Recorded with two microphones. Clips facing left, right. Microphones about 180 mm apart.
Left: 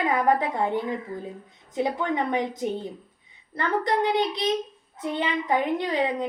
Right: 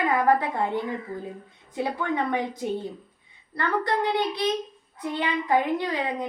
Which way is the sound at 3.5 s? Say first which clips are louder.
Left 1 dB; 20° left (ahead or behind).